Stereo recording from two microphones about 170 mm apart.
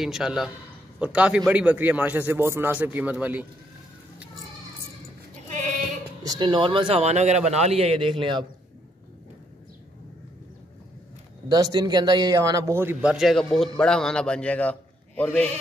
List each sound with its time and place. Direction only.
0.0 s a man's voice: 5° right (ahead or behind)
5.5 s sheep: 45° right (ahead or behind)
6.2 s a man's voice: 25° right (ahead or behind)
11.4 s a man's voice: 25° right (ahead or behind); by 15.4 s 10° left (ahead or behind)